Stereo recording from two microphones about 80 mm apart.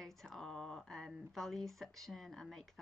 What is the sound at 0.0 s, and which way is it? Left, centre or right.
A woman's voice, centre.